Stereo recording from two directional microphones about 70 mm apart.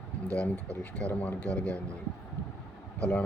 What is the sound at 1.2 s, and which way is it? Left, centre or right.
Speech, left.